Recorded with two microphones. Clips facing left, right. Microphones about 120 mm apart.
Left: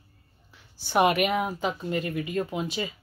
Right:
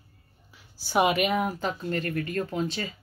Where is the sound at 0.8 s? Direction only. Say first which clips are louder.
Left 1 dB; centre (ahead or behind).